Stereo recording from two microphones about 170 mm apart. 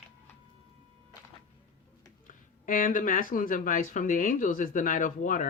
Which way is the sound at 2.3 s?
55° left (ahead or behind).